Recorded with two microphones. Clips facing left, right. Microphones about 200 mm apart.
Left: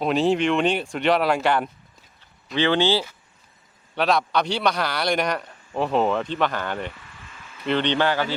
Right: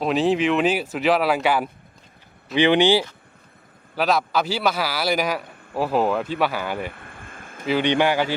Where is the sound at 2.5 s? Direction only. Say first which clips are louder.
Right 4 dB; 15° right (ahead or behind).